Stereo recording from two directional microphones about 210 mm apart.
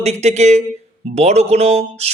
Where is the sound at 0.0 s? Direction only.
30° right (ahead or behind).